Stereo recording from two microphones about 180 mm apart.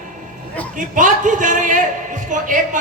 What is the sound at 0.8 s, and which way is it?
A man's voice, 45° right (ahead or behind).